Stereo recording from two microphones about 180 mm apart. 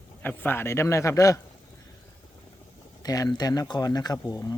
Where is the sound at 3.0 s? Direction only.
20° left (ahead or behind).